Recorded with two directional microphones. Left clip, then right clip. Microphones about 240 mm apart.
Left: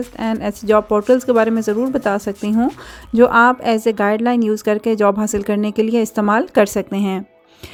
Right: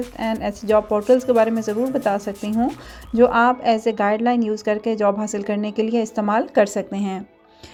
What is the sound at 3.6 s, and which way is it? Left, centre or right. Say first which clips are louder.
A woman's voice: left 2 dB; left.